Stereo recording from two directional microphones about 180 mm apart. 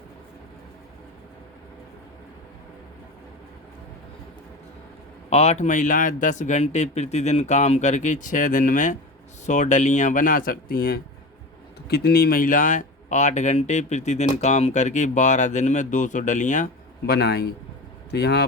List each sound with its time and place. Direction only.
5.3 s speech: 35° left (ahead or behind)
17.1 s a man's voice: 65° left (ahead or behind)